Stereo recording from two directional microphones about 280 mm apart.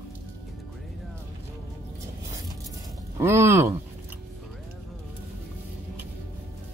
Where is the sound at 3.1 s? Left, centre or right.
Centre.